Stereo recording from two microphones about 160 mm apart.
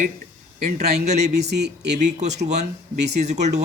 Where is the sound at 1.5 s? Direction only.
90° right.